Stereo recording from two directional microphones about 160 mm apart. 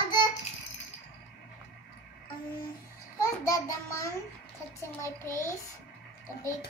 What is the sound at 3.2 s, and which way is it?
Speech, 20° left (ahead or behind).